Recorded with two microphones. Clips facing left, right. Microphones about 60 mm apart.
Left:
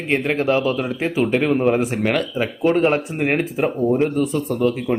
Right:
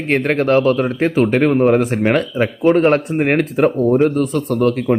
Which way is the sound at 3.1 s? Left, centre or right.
Right.